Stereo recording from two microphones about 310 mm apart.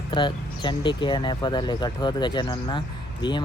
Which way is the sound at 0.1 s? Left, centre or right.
Centre.